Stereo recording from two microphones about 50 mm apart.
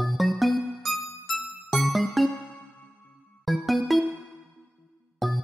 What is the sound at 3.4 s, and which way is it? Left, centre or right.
Music, centre.